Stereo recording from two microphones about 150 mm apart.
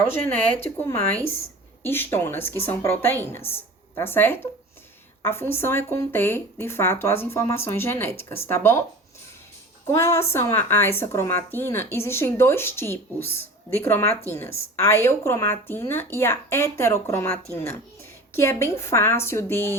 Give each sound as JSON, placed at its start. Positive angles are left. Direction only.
{"t": 0.8, "sound": "a woman's voice", "side_deg": 15}
{"t": 9.8, "sound": "a woman's voice", "side_deg": 20}